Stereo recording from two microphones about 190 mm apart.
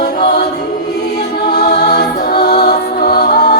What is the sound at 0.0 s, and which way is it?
Music, 55° left (ahead or behind).